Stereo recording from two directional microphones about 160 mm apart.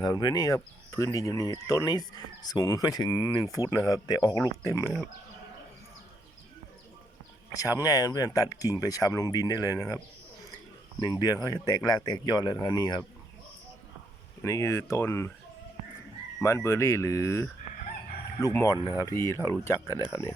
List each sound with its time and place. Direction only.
0.0 s speech: 25° left (ahead or behind)
7.5 s speech: 20° left (ahead or behind)
11.0 s speech: 20° left (ahead or behind)
14.4 s speech: 20° left (ahead or behind)
16.4 s speech: 15° left (ahead or behind)